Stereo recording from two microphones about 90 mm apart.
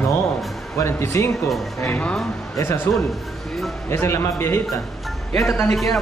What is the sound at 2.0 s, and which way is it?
Speech, 5° left (ahead or behind).